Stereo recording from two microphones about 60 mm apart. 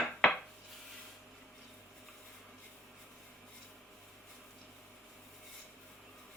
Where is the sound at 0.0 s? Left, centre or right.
Centre.